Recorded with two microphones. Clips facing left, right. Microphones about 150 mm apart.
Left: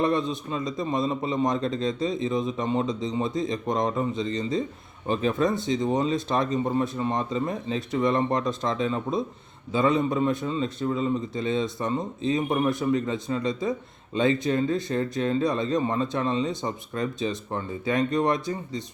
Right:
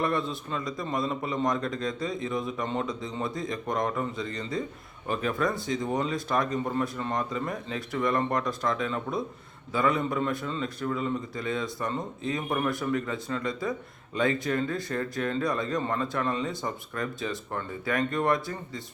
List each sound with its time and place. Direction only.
0.0 s a man's voice: 20° left (ahead or behind)